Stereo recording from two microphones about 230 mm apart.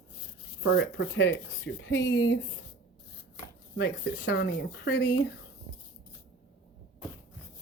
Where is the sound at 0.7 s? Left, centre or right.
Left.